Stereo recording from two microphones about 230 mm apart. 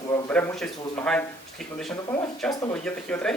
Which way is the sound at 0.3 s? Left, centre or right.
Centre.